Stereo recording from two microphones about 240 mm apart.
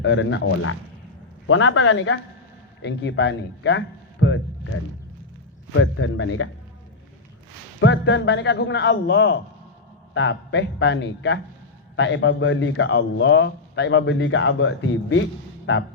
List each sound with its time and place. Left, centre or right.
0.0 s a man's voice: left
5.7 s a man's voice: left
7.8 s a man's voice: left